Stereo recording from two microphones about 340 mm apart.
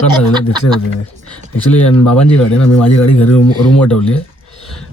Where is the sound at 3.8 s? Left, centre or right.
Centre.